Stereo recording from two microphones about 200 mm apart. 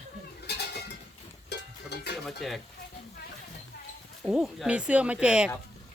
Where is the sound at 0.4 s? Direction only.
55° left (ahead or behind).